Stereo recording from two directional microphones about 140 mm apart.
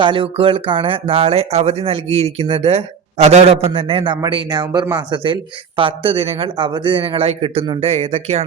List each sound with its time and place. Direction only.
0.0 s speech: 40° right (ahead or behind)